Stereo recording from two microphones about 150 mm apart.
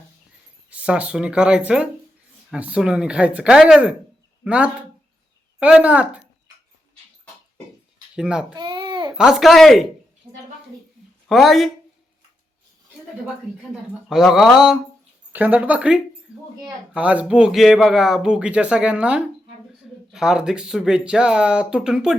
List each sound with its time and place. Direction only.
0.7 s speech: 10° right (ahead or behind)
8.1 s speech: 5° right (ahead or behind)
8.5 s babbling: 30° right (ahead or behind)
9.1 s speech: 5° right (ahead or behind)
11.3 s speech: centre (ahead or behind)
14.1 s speech: centre (ahead or behind)